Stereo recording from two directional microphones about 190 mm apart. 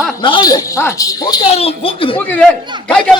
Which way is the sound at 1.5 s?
30° left (ahead or behind).